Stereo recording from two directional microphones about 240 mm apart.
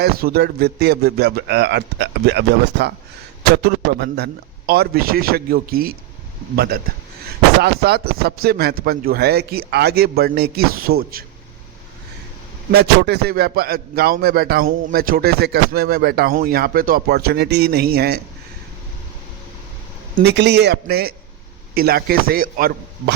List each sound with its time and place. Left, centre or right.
0.0 s a man's voice: right
12.7 s speech: right
20.1 s a man's voice: right